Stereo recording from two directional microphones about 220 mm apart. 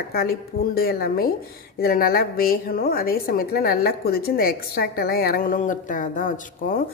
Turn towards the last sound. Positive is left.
turn(degrees=40)  # may be behind; listen again after turning